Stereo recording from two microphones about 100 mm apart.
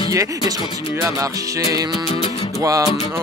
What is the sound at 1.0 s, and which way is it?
Music, 35° right (ahead or behind).